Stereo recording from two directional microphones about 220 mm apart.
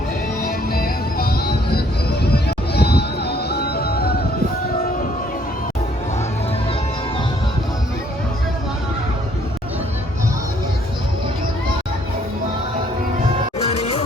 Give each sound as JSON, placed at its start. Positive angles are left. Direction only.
{"t": 0.4, "sound": "music", "side_deg": 40}